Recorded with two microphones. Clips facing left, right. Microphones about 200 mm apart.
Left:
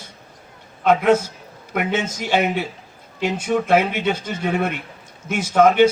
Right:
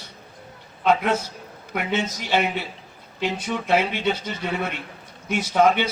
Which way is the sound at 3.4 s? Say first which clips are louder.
Left 5 dB; 50° left (ahead or behind).